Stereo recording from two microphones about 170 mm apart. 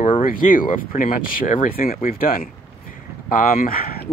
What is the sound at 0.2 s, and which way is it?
Speech, 55° left (ahead or behind).